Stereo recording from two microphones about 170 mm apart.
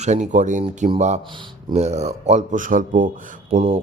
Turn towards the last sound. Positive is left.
turn(degrees=-50)  # may be behind; listen again after turning